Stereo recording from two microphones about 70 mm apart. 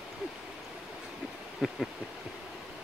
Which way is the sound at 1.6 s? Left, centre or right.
Centre.